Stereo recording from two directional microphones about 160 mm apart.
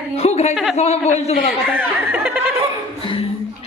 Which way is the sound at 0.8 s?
40° left (ahead or behind).